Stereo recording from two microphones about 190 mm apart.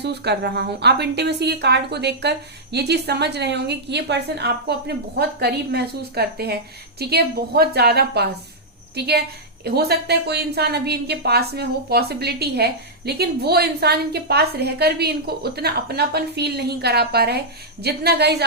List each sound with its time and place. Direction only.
0.0 s a woman's voice: 60° right (ahead or behind)